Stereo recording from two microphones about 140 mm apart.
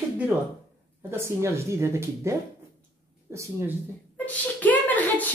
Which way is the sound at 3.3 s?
20° right (ahead or behind).